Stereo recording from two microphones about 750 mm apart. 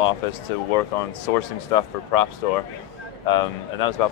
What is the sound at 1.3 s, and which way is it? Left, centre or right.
Speech, left.